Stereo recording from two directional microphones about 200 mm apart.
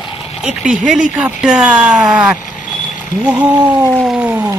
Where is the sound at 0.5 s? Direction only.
5° right (ahead or behind).